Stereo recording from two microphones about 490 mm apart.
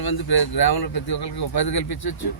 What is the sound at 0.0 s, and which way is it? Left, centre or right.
Speech, left.